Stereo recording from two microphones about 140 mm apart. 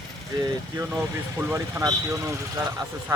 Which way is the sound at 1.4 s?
15° right (ahead or behind).